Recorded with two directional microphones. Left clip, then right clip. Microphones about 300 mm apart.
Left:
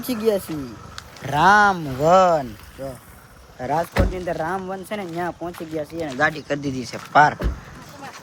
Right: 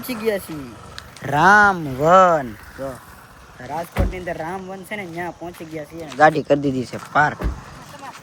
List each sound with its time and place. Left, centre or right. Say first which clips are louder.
0.0 s speech: left 2 dB; centre
3.7 s speech: left 5 dB; left
4.1 s speech: left 2 dB; centre
6.1 s speech: right 8 dB; centre